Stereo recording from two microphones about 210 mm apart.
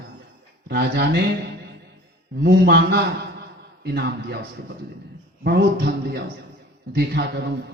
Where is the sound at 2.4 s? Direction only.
55° right (ahead or behind).